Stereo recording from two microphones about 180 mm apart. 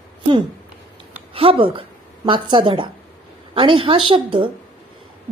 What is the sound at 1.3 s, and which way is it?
A woman's voice, 30° right (ahead or behind).